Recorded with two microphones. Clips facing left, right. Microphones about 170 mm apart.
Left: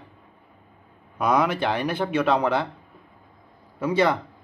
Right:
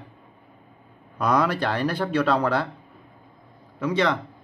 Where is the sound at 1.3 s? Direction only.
20° left (ahead or behind).